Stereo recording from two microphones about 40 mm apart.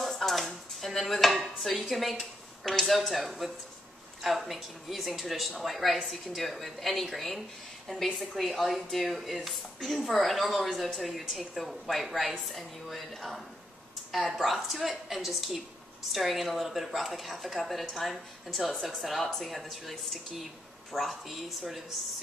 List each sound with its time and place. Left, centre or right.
0.0 s chopping: centre
4.2 s speech: centre
14.4 s speech: centre